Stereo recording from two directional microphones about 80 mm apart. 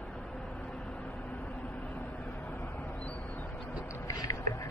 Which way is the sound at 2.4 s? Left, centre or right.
Centre.